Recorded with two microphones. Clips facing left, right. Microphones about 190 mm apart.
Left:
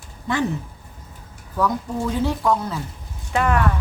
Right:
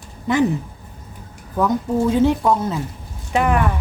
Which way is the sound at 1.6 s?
20° right (ahead or behind).